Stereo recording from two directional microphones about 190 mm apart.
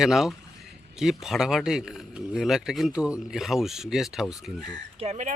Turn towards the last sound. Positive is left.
turn(degrees=-40)  # may be behind; listen again after turning